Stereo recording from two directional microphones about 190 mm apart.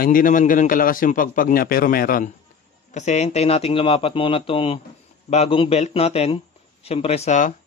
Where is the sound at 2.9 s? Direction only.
35° left (ahead or behind).